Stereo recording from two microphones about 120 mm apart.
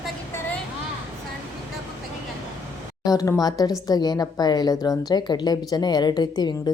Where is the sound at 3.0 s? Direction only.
30° left (ahead or behind).